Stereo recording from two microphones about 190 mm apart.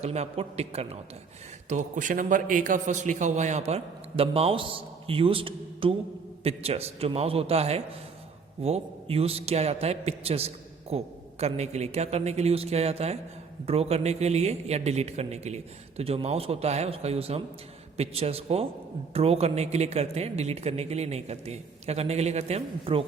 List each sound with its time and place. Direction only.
0.0 s a man's voice: 35° right (ahead or behind)
1.7 s a man's voice: 45° right (ahead or behind)